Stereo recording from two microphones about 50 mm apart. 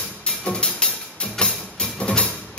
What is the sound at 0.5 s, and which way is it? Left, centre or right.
Music, centre.